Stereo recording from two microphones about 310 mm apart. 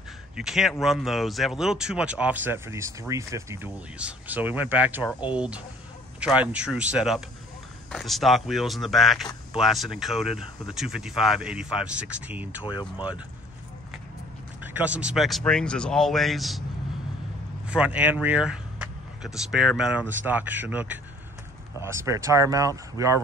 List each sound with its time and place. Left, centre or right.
0.4 s speech: centre
12.6 s speech: centre
14.6 s speech: centre
17.6 s speech: centre